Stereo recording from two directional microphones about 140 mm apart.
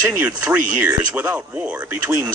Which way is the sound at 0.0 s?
15° right (ahead or behind).